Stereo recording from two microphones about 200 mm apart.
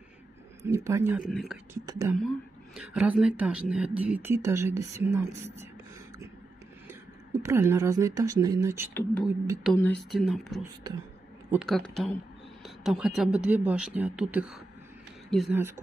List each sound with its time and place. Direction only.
0.7 s speech: 15° right (ahead or behind)
2.1 s speech: centre (ahead or behind)
6.9 s speech: 15° right (ahead or behind)
8.9 s speech: 5° left (ahead or behind)
9.6 s speech: 5° right (ahead or behind)
10.6 s speech: 20° right (ahead or behind)
11.5 s speech: centre (ahead or behind)